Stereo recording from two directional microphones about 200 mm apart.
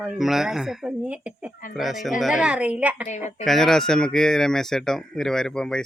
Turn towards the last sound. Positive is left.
turn(degrees=5)  # may be behind; listen again after turning